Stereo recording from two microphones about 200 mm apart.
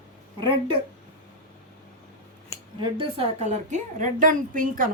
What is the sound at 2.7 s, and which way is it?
A woman's voice, 25° right (ahead or behind).